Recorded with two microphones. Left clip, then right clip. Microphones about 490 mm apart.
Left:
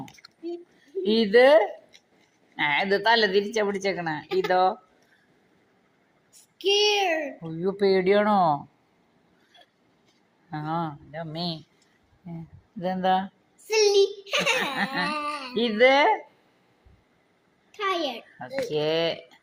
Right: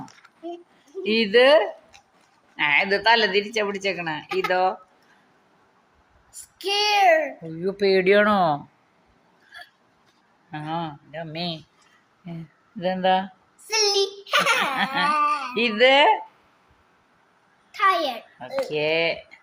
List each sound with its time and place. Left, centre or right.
1.1 s a woman's voice: left
6.6 s a child's voice: left
7.6 s a child's voice: left
10.5 s a woman's voice: left
12.8 s a woman's voice: left
13.7 s a child's voice: left
15.5 s a woman's voice: left
17.7 s a child's voice: left
18.3 s a woman's voice: left